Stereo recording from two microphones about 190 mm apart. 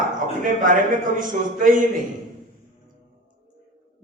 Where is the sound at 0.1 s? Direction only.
45° right (ahead or behind).